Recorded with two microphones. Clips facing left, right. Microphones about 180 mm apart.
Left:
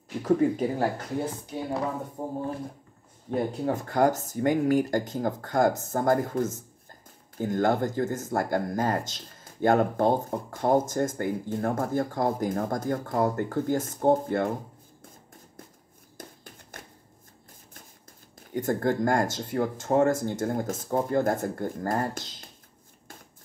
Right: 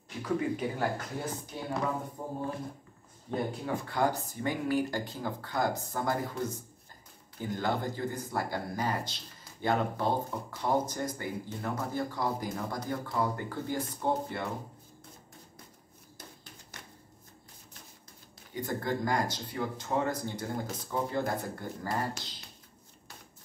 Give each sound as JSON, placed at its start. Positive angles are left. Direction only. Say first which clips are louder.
{"t": 0.2, "sound": "speech", "louder": "left 8 dB", "side_deg": 35}
{"t": 3.3, "sound": "speech", "louder": "left 6 dB", "side_deg": 45}
{"t": 16.2, "sound": "hands", "louder": "left 6 dB", "side_deg": 50}
{"t": 16.7, "sound": "shuffling cards", "louder": "left 5 dB", "side_deg": 50}
{"t": 18.5, "sound": "speech", "louder": "left 7 dB", "side_deg": 50}